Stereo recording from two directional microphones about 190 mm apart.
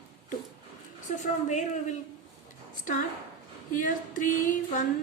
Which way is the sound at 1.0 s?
40° left (ahead or behind).